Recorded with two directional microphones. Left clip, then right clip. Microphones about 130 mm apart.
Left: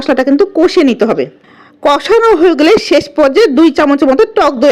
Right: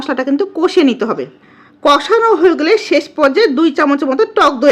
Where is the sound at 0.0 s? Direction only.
40° left (ahead or behind).